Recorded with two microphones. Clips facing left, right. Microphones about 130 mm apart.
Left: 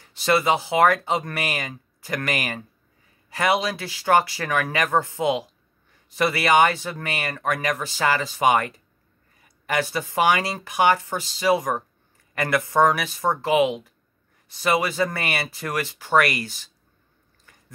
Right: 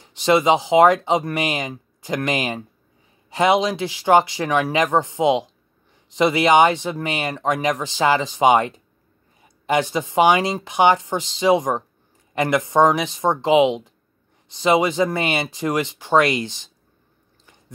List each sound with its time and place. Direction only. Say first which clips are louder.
0.0 s speech: right 4 dB; 15° right (ahead or behind)